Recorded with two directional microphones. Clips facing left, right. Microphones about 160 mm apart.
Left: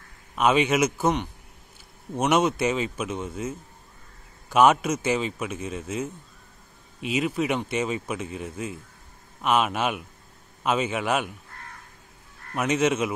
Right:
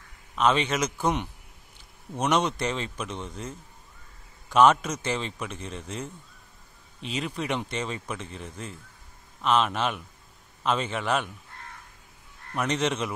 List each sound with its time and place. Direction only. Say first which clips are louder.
0.4 s speech: left 3 dB; 10° left (ahead or behind)
2.1 s a man's voice: left 3 dB; 5° left (ahead or behind)
12.5 s a man's voice: left 4 dB; 5° left (ahead or behind)